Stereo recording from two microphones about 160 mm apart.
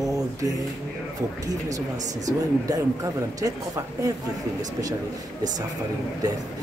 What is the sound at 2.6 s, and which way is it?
Speech, 20° right (ahead or behind).